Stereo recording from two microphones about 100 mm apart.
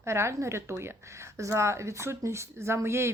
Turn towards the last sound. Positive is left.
turn(degrees=-25)  # may be behind; listen again after turning